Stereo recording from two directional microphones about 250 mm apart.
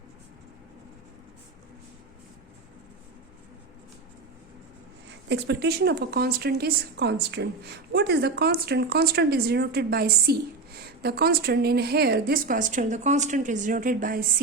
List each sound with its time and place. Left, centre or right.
5.3 s a woman's voice: right